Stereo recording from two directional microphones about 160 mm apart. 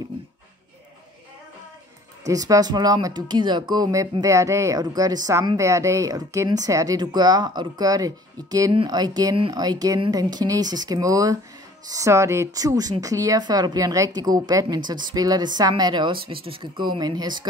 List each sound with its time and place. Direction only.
2.2 s speech: 20° right (ahead or behind)